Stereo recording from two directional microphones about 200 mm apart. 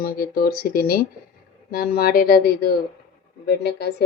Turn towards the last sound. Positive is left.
turn(degrees=55)  # may be behind; listen again after turning